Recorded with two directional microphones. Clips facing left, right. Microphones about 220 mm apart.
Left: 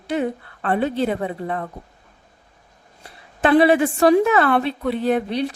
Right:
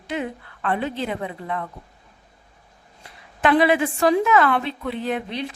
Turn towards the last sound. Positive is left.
turn(degrees=40)  # may be behind; listen again after turning